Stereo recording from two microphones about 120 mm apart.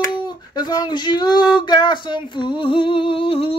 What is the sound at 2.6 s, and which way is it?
Humming, 45° left (ahead or behind).